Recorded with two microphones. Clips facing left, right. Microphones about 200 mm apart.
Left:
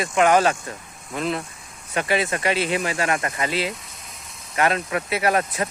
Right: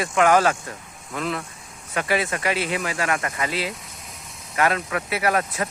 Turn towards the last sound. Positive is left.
turn(degrees=25)  # may be behind; listen again after turning